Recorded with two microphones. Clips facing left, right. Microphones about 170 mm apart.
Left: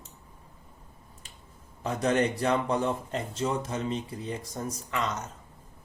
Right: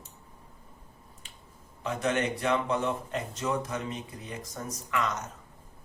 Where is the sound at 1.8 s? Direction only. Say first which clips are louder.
Left 3 dB; 35° left (ahead or behind).